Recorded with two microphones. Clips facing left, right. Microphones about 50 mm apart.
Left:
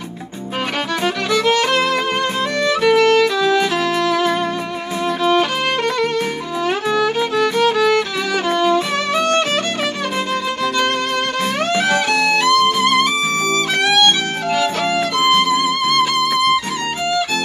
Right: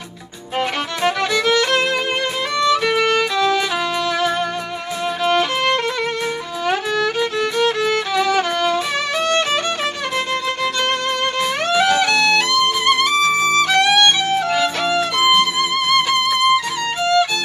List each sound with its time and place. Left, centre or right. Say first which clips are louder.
1.3 s music: left 5 dB; left
2.9 s violin: left 4 dB; centre
7.0 s music: left 3 dB; centre
8.5 s violin: left 3 dB; centre
11.7 s music: right 2 dB; left
13.5 s music: right 2 dB; centre
14.5 s music: even; centre